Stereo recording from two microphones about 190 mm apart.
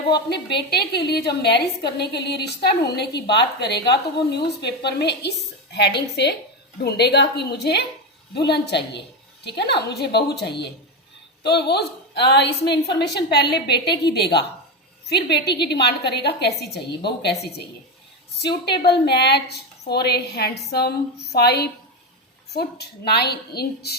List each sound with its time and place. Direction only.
0.3 s a woman's voice: 60° left (ahead or behind)
11.4 s a woman's voice: 60° left (ahead or behind)
18.3 s a woman's voice: 60° left (ahead or behind)